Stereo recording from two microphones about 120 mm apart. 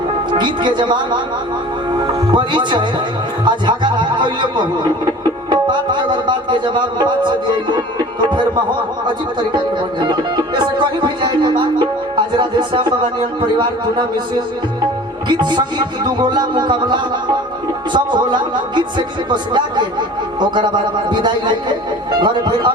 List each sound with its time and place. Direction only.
0.3 s music: 40° right (ahead or behind)
2.3 s music: 40° right (ahead or behind)
10.1 s music: 40° right (ahead or behind)
15.3 s music: 40° right (ahead or behind)